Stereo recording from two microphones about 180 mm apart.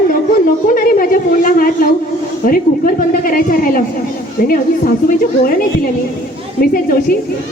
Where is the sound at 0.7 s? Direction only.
50° left (ahead or behind).